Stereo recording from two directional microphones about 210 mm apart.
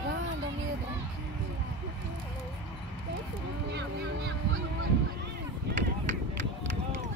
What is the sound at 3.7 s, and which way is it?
Speech, 55° right (ahead or behind).